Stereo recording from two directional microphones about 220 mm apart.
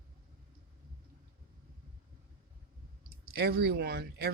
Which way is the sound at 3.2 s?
45° right (ahead or behind).